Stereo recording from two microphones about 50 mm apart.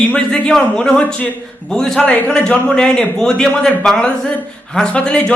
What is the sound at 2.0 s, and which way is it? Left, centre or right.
Speech, left.